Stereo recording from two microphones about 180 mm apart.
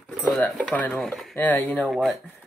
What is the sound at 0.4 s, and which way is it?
Speech, 5° left (ahead or behind).